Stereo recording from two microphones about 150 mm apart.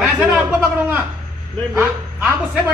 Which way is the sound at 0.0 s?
10° right (ahead or behind).